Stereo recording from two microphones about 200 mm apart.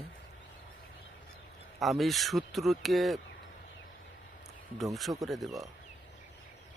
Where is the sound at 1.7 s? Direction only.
Centre (ahead or behind).